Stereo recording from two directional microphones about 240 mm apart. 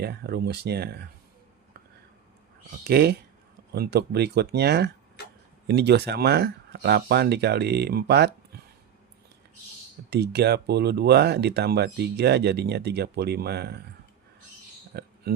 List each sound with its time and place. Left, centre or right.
0.0 s speech: right
2.8 s speech: right
10.1 s speech: right
14.9 s a sound: right